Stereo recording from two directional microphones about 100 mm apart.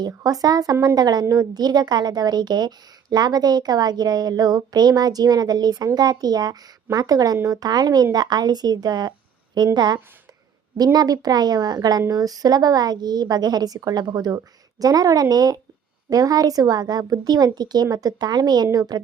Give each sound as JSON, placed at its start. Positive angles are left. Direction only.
{"t": 0.2, "sound": "a woman's voice", "side_deg": -40}